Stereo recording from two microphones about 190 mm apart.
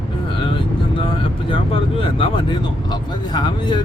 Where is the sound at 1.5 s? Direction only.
30° left (ahead or behind).